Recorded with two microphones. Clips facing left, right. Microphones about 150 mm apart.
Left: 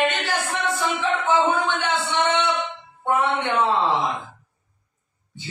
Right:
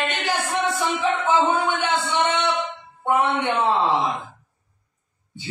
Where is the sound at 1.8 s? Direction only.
10° right (ahead or behind).